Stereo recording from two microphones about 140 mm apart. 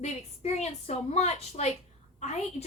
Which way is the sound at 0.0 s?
55° left (ahead or behind).